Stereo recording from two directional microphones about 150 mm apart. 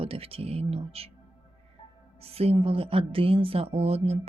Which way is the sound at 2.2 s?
40° right (ahead or behind).